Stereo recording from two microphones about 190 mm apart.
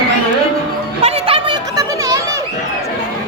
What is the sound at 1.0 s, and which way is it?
Chatter, 30° right (ahead or behind).